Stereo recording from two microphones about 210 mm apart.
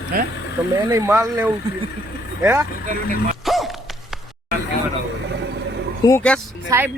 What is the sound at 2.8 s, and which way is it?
Speech, 40° right (ahead or behind).